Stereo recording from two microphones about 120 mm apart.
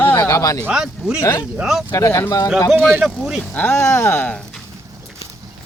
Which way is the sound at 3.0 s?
5° right (ahead or behind).